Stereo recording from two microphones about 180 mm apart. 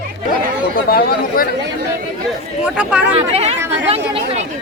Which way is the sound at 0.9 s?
60° left (ahead or behind).